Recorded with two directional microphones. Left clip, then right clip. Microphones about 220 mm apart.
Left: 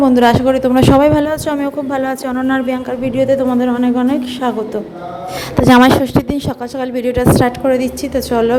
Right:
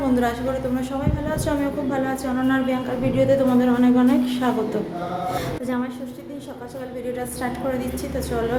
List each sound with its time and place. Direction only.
0.0 s a woman's voice: 40° left (ahead or behind)
5.6 s a woman's voice: 50° left (ahead or behind); by 8.5 s 35° left (ahead or behind)